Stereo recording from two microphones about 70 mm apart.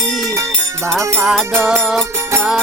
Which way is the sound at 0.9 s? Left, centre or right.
Centre.